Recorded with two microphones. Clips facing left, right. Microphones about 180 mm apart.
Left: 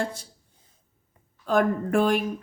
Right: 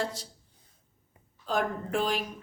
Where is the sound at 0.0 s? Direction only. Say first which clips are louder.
Left 3 dB; 50° left (ahead or behind).